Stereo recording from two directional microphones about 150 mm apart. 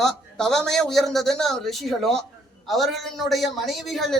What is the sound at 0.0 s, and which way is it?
A man's voice, centre (ahead or behind).